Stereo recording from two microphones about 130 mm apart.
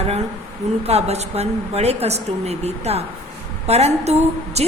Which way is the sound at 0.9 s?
55° right (ahead or behind).